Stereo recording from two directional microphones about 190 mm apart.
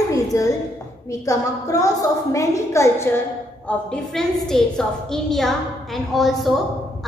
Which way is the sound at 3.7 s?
5° left (ahead or behind).